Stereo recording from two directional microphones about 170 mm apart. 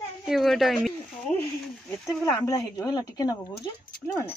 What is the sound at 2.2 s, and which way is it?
A woman's voice, 20° left (ahead or behind).